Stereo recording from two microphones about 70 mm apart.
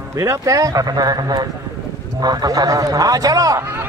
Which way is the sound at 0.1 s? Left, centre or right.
Right.